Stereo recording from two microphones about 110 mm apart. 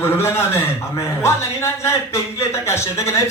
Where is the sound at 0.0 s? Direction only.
25° left (ahead or behind).